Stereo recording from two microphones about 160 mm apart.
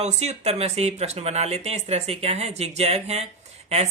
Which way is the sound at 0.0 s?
45° right (ahead or behind).